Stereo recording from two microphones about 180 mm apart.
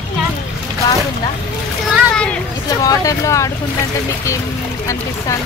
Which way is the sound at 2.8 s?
20° left (ahead or behind).